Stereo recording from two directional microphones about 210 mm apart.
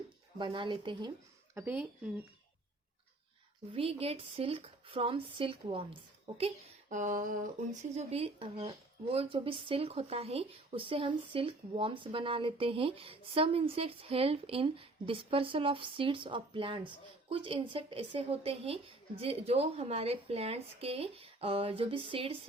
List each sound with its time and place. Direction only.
0.3 s speech: 25° right (ahead or behind)
1.5 s speech: 10° right (ahead or behind)
3.7 s speech: 25° right (ahead or behind)
6.9 s speech: 40° right (ahead or behind)